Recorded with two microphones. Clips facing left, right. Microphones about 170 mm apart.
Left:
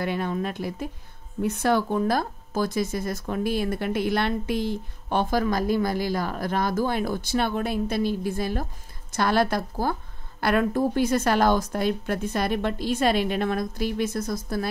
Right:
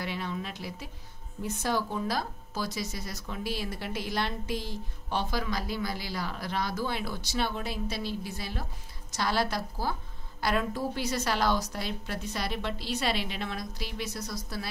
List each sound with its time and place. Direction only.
0.0 s speech: 50° left (ahead or behind)
1.4 s speech: 60° left (ahead or behind)